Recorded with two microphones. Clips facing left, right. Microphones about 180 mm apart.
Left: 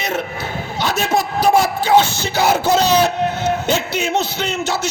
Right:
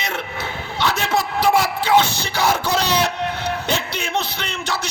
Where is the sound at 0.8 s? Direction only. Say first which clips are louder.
Left 2 dB; 25° left (ahead or behind).